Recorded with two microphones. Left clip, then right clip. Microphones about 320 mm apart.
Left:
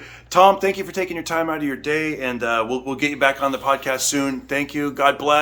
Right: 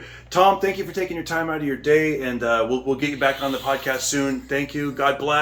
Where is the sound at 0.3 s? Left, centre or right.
Centre.